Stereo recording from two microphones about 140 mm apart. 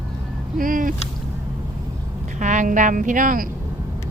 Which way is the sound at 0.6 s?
75° right (ahead or behind).